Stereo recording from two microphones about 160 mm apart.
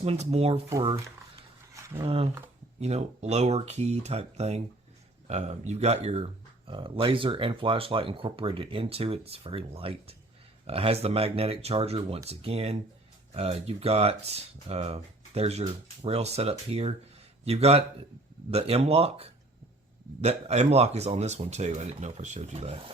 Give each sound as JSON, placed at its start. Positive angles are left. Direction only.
{"t": 0.0, "sound": "speech", "side_deg": -40}
{"t": 0.7, "sound": "speech", "side_deg": -20}
{"t": 1.7, "sound": "a sound", "side_deg": -15}
{"t": 2.0, "sound": "speech", "side_deg": -35}